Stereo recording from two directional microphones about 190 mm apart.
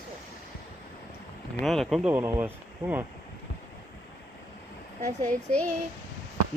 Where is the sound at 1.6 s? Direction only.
Centre (ahead or behind).